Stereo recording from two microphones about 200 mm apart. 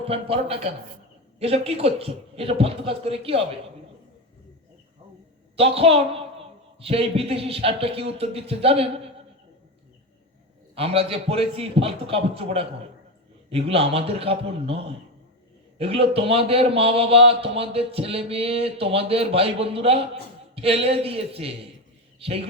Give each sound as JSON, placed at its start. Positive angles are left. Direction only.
{"t": 0.0, "sound": "a man's voice", "side_deg": -30}
{"t": 5.5, "sound": "a man's voice", "side_deg": -30}
{"t": 10.8, "sound": "a man's voice", "side_deg": -30}